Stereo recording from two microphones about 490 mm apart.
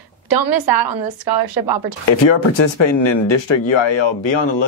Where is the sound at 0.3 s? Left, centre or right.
Right.